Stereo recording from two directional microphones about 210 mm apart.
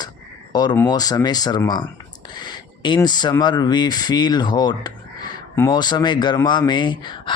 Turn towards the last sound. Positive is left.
turn(degrees=20)  # may be behind; listen again after turning